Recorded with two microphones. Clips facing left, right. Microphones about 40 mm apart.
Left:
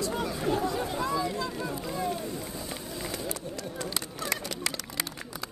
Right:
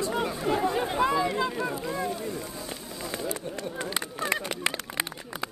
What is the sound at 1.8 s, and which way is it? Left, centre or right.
Speech, centre.